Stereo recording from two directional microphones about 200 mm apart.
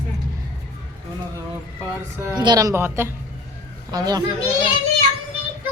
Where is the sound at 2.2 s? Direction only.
20° right (ahead or behind).